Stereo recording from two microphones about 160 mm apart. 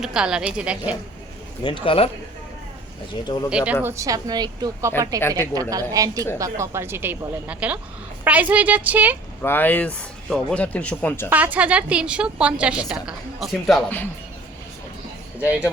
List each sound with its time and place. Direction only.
0.0 s a woman's voice: 5° right (ahead or behind)
1.6 s speech: 30° left (ahead or behind)
3.2 s speech: 25° left (ahead or behind)
3.5 s a woman's voice: 5° right (ahead or behind)
3.8 s a woman's voice: 20° right (ahead or behind)
9.4 s speech: 15° left (ahead or behind)
11.3 s a woman's voice: 10° right (ahead or behind)